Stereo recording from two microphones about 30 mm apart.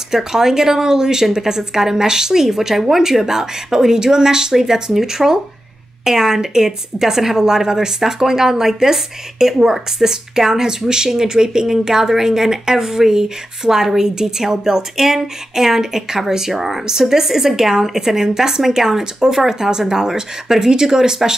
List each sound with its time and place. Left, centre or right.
0.1 s speech: centre